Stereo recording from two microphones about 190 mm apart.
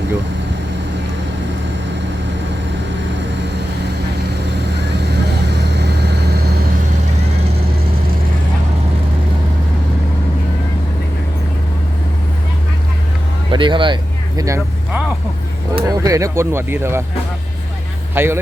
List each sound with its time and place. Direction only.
5.5 s vehicle: 60° right (ahead or behind)
13.5 s vehicle: 25° right (ahead or behind)
15.7 s speech: 20° right (ahead or behind)
18.1 s speech: 10° right (ahead or behind)